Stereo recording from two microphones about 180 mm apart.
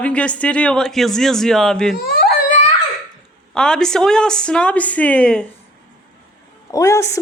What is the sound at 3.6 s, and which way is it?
A woman's voice, 5° left (ahead or behind).